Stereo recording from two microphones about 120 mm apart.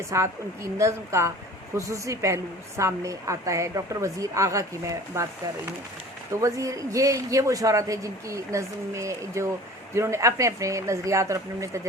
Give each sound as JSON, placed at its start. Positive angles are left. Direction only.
{"t": 0.1, "sound": "a woman's voice", "side_deg": -25}
{"t": 6.4, "sound": "a woman's voice", "side_deg": -25}